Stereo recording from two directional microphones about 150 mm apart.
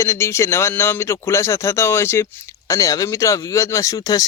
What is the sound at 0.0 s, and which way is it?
Speech, 20° left (ahead or behind).